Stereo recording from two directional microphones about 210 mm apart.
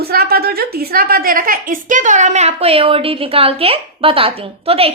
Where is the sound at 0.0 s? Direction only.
45° right (ahead or behind).